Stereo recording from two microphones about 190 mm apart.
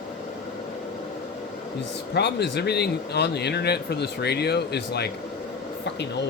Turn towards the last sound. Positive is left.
turn(degrees=60)  # may be behind; listen again after turning